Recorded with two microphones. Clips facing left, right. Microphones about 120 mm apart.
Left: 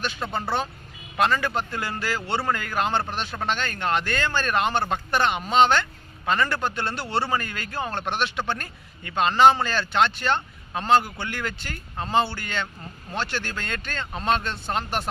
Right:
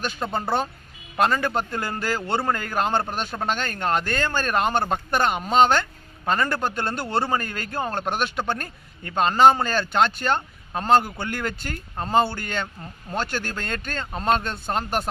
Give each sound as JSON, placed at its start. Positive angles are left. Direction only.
{"t": 0.0, "sound": "a man's voice", "side_deg": -40}